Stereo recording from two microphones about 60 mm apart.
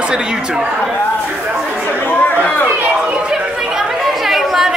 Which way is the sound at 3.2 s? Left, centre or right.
Centre.